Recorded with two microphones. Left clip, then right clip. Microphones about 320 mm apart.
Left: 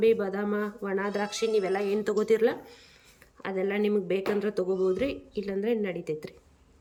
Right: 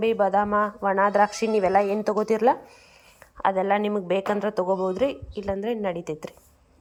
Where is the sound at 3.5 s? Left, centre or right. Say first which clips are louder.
Right 2 dB; centre.